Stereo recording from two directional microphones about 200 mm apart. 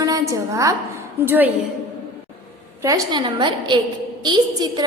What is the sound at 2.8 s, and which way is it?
A woman's voice, 20° right (ahead or behind).